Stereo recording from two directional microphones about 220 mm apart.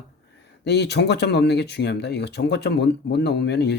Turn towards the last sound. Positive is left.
turn(degrees=50)  # may be behind; listen again after turning